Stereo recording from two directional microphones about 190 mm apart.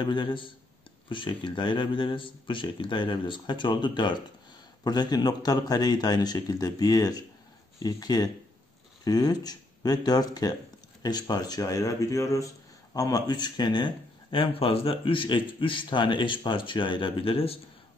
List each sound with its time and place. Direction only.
0.0 s speech: 25° left (ahead or behind)